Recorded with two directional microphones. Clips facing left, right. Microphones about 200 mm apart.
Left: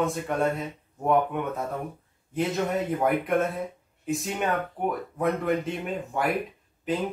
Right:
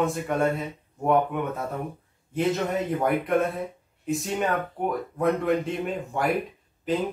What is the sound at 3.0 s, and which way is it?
Speech, centre (ahead or behind).